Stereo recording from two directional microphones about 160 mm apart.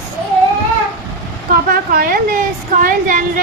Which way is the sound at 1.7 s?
70° right (ahead or behind).